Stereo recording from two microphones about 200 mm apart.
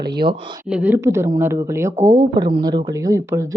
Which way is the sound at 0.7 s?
10° right (ahead or behind).